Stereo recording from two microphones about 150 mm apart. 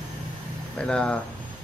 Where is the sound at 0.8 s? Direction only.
5° left (ahead or behind).